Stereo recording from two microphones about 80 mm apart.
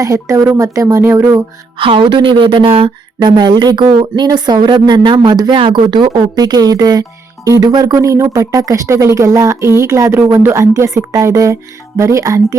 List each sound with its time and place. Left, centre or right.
0.0 s speech: right
1.8 s speech: right